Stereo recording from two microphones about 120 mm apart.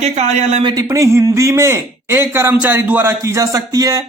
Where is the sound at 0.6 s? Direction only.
35° right (ahead or behind).